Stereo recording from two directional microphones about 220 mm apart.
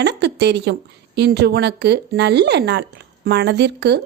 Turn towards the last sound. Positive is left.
turn(degrees=-50)  # may be behind; listen again after turning